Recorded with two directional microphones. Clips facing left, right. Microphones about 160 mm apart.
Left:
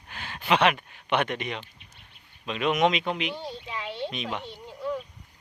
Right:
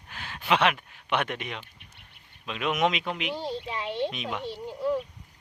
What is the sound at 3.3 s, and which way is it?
Speech, 30° right (ahead or behind).